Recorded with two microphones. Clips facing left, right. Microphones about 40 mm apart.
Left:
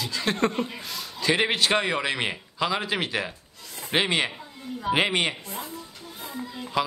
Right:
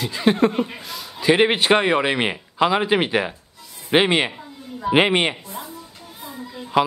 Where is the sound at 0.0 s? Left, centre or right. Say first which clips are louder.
Right 7 dB; right.